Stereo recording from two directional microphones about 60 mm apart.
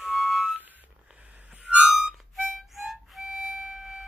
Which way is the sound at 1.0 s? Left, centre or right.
Right.